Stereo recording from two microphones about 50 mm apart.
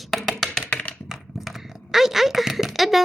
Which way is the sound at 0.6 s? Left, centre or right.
Left.